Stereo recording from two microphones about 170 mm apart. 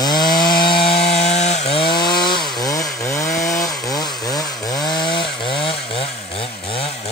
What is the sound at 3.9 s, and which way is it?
Chainsaw, 25° left (ahead or behind).